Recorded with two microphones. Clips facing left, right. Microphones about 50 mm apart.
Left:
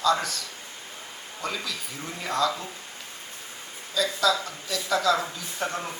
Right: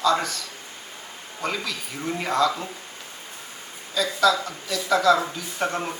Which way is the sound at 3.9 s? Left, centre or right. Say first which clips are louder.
Right 3 dB; right.